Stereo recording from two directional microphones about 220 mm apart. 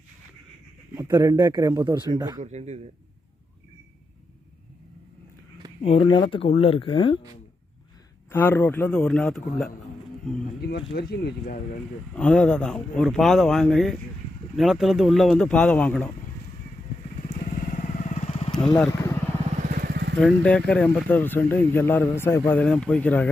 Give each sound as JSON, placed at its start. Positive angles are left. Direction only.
{"t": 0.9, "sound": "speech", "side_deg": -15}
{"t": 2.4, "sound": "speech", "side_deg": -30}
{"t": 5.8, "sound": "speech", "side_deg": 25}
{"t": 8.3, "sound": "speech", "side_deg": 10}
{"t": 10.6, "sound": "speech", "side_deg": 45}
{"t": 12.1, "sound": "speech", "side_deg": 5}
{"t": 17.2, "sound": "motorcycle", "side_deg": 35}
{"t": 19.6, "sound": "vehicle", "side_deg": -40}
{"t": 20.1, "sound": "speech", "side_deg": 5}